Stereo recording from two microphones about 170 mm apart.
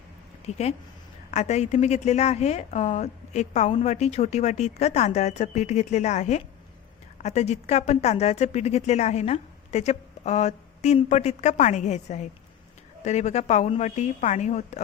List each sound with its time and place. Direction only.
0.4 s a woman's voice: 40° left (ahead or behind)